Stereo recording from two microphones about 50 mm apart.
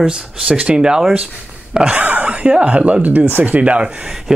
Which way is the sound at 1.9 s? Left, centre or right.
Right.